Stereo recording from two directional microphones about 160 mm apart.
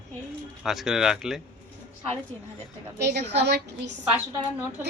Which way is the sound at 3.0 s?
90° right.